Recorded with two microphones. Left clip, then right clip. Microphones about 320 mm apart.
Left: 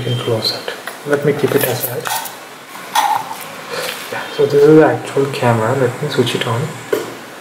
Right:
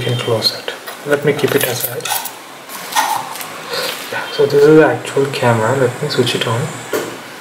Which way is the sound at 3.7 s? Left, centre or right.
Centre.